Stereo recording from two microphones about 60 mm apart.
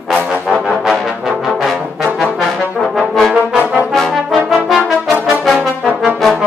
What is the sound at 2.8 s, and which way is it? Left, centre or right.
Brass instrument, centre.